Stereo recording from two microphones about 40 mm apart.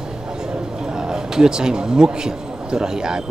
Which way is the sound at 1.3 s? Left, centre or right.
Centre.